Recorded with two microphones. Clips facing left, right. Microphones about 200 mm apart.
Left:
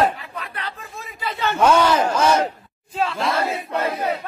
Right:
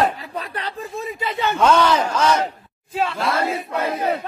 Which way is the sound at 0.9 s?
25° right (ahead or behind).